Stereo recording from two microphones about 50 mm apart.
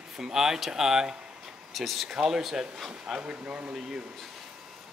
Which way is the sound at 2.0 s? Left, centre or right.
Centre.